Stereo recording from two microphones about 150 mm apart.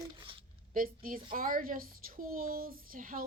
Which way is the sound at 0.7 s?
70° right (ahead or behind).